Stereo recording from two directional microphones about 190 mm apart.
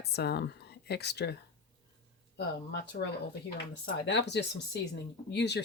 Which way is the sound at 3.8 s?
65° left (ahead or behind).